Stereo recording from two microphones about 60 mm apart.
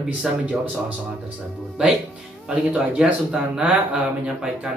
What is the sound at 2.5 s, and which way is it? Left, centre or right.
Speech, centre.